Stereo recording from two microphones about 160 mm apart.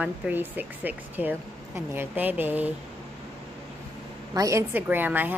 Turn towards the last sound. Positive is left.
turn(degrees=-10)  # may be behind; listen again after turning